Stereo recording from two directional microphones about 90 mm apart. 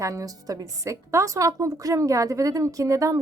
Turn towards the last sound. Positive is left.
turn(degrees=-35)  # may be behind; listen again after turning